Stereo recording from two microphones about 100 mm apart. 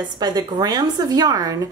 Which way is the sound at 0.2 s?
40° right (ahead or behind).